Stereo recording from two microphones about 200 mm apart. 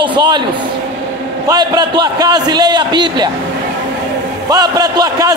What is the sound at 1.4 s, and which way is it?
A man's voice, 20° right (ahead or behind).